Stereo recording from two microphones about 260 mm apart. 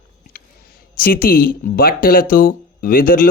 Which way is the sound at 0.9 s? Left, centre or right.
Left.